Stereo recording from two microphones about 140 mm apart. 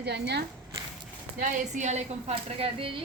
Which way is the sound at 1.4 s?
65° right (ahead or behind).